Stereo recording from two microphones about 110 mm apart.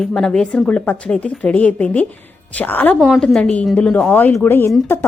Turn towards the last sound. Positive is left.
turn(degrees=20)  # may be behind; listen again after turning